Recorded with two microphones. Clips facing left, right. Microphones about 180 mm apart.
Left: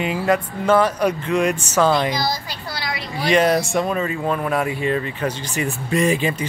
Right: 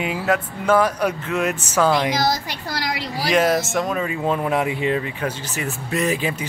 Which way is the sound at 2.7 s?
85° right.